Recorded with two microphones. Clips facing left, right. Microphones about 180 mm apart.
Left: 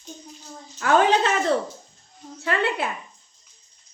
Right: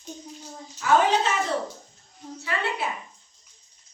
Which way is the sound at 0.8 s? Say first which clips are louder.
Left 2 dB; 60° left (ahead or behind).